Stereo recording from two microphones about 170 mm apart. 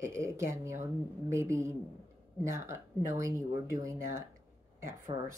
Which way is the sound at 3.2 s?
20° right (ahead or behind).